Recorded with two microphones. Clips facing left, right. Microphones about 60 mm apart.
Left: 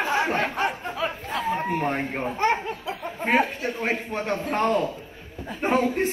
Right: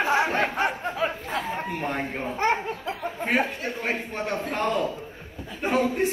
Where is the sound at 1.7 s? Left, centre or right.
Left.